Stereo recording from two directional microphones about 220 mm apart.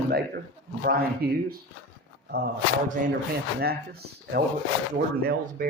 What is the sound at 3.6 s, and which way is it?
Speech, 45° right (ahead or behind).